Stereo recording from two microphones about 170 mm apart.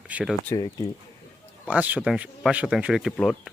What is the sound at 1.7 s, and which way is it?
Speech, 10° right (ahead or behind).